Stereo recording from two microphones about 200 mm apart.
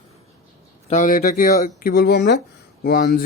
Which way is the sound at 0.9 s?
40° left (ahead or behind).